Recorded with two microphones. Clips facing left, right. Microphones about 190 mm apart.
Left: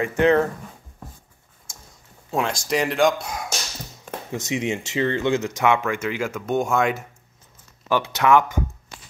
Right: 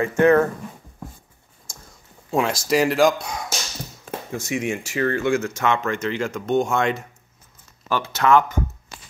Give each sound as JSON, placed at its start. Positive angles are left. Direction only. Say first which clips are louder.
{"t": 0.0, "sound": "speech", "louder": "right 2 dB", "side_deg": 20}
{"t": 2.3, "sound": "speech", "louder": "right 3 dB", "side_deg": -5}
{"t": 4.3, "sound": "speech", "louder": "even", "side_deg": 20}